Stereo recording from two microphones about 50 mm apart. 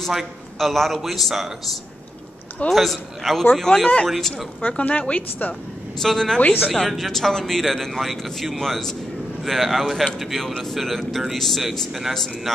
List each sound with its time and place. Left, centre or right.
0.0 s speech: centre
2.7 s speech: centre
3.7 s speech: centre
4.6 s speech: left
5.9 s speech: centre
6.4 s speech: left
6.9 s speech: centre